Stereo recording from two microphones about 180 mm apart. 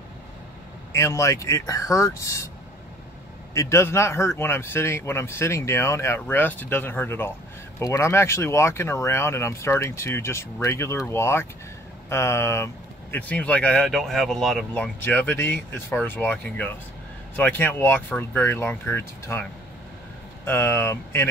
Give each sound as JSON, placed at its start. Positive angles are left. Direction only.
{"t": 0.9, "sound": "speech", "side_deg": 15}
{"t": 3.5, "sound": "speech", "side_deg": 15}
{"t": 20.4, "sound": "speech", "side_deg": 15}